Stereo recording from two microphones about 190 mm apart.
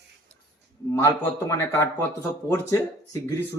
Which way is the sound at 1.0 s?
15° left (ahead or behind).